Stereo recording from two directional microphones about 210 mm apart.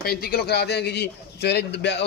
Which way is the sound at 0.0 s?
45° left (ahead or behind).